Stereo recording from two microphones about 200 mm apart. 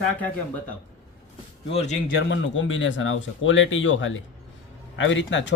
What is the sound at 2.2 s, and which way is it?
Speech, 70° left (ahead or behind).